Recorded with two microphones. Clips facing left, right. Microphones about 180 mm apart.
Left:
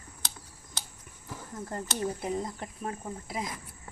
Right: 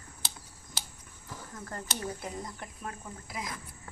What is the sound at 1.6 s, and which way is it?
Speech, 20° left (ahead or behind).